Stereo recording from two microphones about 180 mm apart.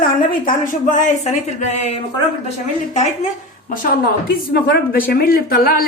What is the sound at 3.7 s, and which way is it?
A woman's voice, 55° left (ahead or behind).